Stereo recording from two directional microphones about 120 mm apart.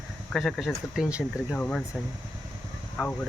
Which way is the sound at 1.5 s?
10° left (ahead or behind).